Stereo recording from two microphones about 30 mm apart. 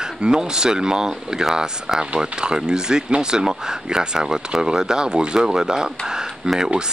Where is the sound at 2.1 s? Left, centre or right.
Right.